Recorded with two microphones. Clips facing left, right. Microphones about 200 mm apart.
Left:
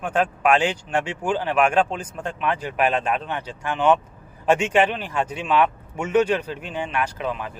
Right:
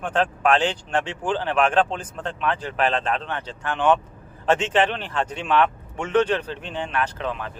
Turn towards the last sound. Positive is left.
turn(degrees=10)  # may be behind; listen again after turning